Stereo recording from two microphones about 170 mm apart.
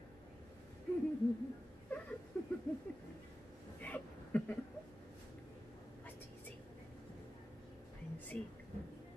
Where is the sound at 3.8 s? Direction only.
10° left (ahead or behind).